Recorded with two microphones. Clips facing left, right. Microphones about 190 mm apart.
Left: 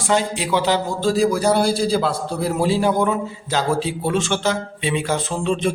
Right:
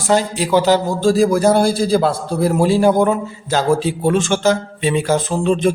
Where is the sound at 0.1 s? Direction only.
40° right (ahead or behind).